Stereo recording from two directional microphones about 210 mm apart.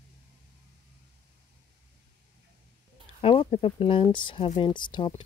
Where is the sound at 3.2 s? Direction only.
25° left (ahead or behind).